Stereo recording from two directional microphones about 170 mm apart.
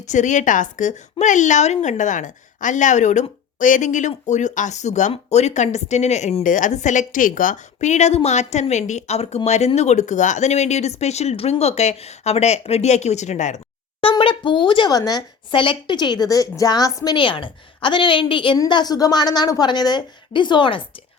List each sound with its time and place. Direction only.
0.0 s a woman's voice: 45° left (ahead or behind)
14.0 s speech: 30° left (ahead or behind)